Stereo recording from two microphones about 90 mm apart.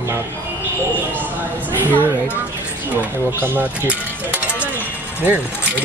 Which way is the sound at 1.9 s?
20° left (ahead or behind).